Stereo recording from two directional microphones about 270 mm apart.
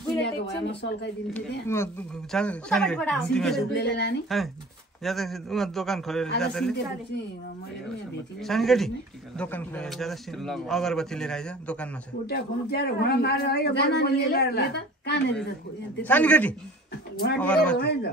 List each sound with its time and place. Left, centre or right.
0.2 s speech: left
2.3 s a man's voice: centre
3.7 s speech: left
5.0 s a man's voice: centre
8.5 s a man's voice: centre
12.3 s speech: left
16.0 s a man's voice: centre
17.7 s speech: left